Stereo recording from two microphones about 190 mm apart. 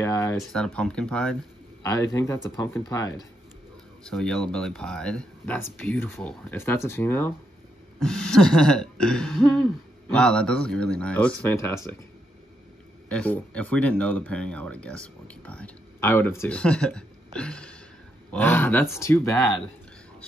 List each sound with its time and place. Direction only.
0.0 s speech: 15° left (ahead or behind)
0.4 s burping: 5° left (ahead or behind)
1.8 s speech: 15° left (ahead or behind)
4.0 s speech: 5° left (ahead or behind)
8.0 s burping: 5° left (ahead or behind)
13.1 s speech: 5° left (ahead or behind)